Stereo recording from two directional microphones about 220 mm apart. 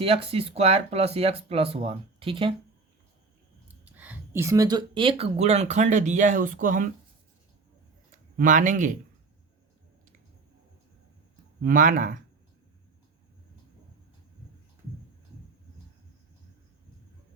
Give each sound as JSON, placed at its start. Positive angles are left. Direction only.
{"t": 0.0, "sound": "speech", "side_deg": -25}
{"t": 3.8, "sound": "speech", "side_deg": -5}
{"t": 8.4, "sound": "speech", "side_deg": -35}
{"t": 11.6, "sound": "speech", "side_deg": -40}